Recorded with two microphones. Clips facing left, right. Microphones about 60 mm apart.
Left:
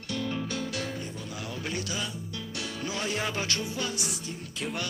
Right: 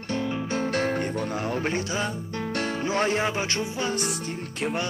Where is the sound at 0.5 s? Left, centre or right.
Right.